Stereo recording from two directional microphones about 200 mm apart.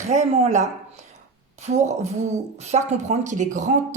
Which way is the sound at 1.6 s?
35° right (ahead or behind).